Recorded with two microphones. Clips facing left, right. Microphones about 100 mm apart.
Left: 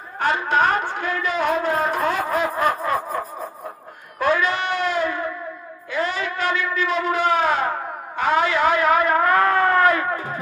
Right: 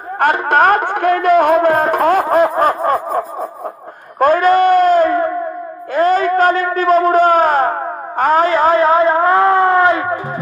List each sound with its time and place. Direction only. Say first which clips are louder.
0.2 s speech: right 7 dB; 55° right (ahead or behind)
2.2 s snicker: right 8 dB; 40° right (ahead or behind)
4.2 s a sound: right 10 dB; 50° right (ahead or behind); by 10.2 s 25° right (ahead or behind)